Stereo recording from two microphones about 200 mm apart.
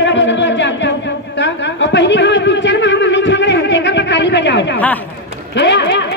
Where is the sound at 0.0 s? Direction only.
65° left (ahead or behind).